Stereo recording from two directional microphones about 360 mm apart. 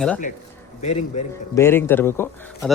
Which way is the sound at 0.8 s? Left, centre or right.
Centre.